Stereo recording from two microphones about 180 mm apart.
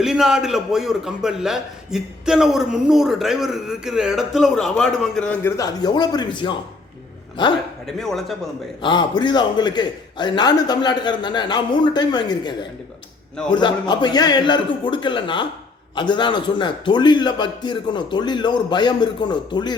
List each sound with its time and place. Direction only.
0.0 s a man's voice: centre (ahead or behind); by 6.6 s 25° left (ahead or behind)
7.9 s a man's voice: centre (ahead or behind)
8.8 s a man's voice: 25° left (ahead or behind)